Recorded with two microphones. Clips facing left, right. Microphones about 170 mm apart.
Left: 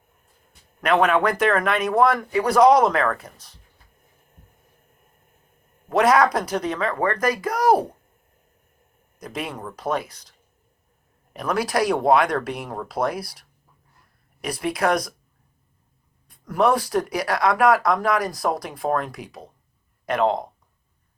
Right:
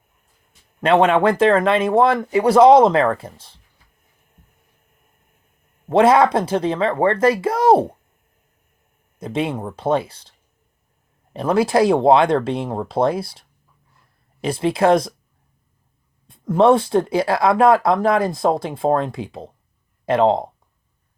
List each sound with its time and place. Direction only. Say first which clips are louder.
0.8 s speech: right 4 dB; 25° right (ahead or behind)
5.9 s speech: right 4 dB; 25° right (ahead or behind)
9.1 s speech: right 8 dB; 25° right (ahead or behind)
11.3 s speech: right 6 dB; 25° right (ahead or behind)
14.4 s speech: right 6 dB; 25° right (ahead or behind)
16.2 s speech: right 6 dB; 25° right (ahead or behind)